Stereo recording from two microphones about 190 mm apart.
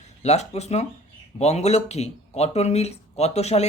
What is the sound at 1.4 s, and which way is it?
Speech, 35° left (ahead or behind).